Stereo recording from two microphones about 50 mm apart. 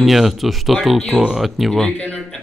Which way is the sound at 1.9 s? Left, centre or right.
Left.